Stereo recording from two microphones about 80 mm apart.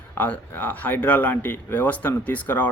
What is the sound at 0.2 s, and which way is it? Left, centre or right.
Speech, left.